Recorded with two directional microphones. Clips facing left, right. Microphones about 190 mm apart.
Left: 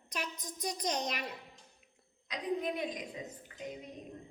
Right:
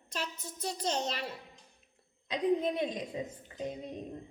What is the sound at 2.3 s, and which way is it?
A woman's voice, 25° right (ahead or behind).